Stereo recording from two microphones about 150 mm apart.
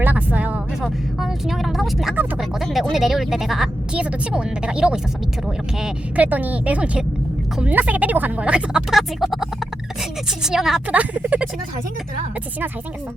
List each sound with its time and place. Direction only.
0.0 s speech: 10° right (ahead or behind)